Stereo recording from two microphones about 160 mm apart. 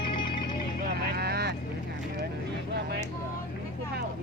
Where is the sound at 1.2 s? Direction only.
90° right.